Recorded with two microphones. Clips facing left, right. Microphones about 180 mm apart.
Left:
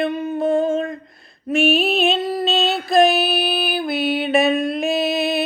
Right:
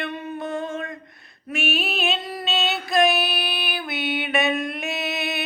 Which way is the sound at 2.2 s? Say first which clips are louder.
Left 7 dB; 25° left (ahead or behind).